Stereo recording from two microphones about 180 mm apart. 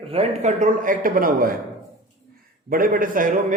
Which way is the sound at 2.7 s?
50° right (ahead or behind).